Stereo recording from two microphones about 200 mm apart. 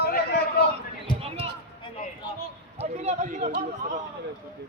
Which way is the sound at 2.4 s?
30° right (ahead or behind).